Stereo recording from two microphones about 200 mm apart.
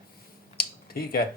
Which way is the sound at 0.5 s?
50° left (ahead or behind).